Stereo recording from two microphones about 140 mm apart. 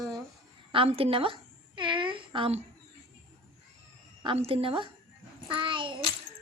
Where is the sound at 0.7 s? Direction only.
40° right (ahead or behind).